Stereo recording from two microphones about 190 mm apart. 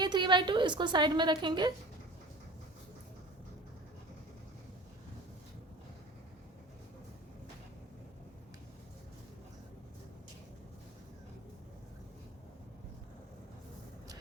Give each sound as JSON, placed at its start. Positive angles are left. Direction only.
{"t": 0.0, "sound": "a woman's voice", "side_deg": -25}